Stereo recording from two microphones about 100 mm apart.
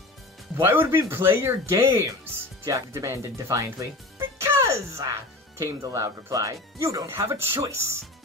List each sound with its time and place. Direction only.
0.6 s speech: 25° right (ahead or behind)